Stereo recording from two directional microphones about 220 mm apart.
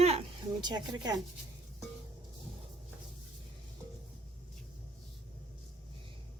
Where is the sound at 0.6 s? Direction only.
20° right (ahead or behind).